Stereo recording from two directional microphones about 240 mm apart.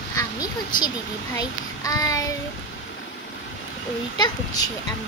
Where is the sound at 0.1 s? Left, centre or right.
Centre.